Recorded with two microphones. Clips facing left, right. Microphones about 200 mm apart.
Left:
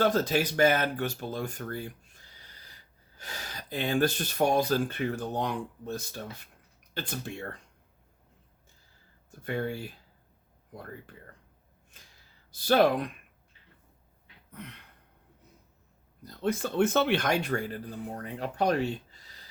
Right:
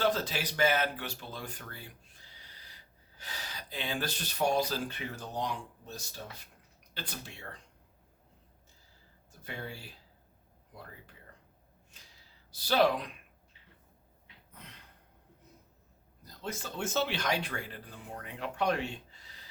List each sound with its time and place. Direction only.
0.0 s speech: 45° left (ahead or behind)
9.4 s speech: 55° left (ahead or behind)
12.5 s speech: 50° left (ahead or behind)
14.5 s a sound: 60° left (ahead or behind)
16.2 s speech: 60° left (ahead or behind); by 19.2 s 40° left (ahead or behind)